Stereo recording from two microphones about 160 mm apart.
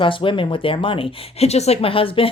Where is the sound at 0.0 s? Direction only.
30° left (ahead or behind).